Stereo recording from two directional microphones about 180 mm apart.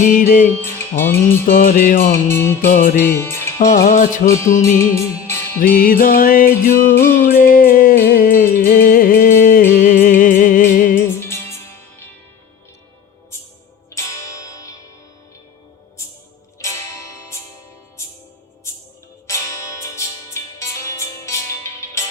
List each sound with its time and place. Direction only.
0.0 s music: 45° left (ahead or behind)
0.9 s music: 10° left (ahead or behind)
1.5 s music: 55° left (ahead or behind)
2.2 s music: 15° left (ahead or behind)
2.6 s music: 50° left (ahead or behind)
3.0 s speech: 15° left (ahead or behind)
3.8 s music: 45° left (ahead or behind)
4.8 s music: 15° left (ahead or behind)
5.7 s music: 55° left (ahead or behind)
11.2 s music: 15° left (ahead or behind)
13.9 s zither: 15° left (ahead or behind)
16.6 s music: 15° left (ahead or behind)
19.3 s music: 15° left (ahead or behind)